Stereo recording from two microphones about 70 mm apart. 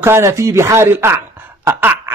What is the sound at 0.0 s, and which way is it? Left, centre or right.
Speech, right.